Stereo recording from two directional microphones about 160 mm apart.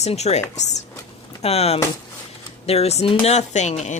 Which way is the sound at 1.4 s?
40° left (ahead or behind).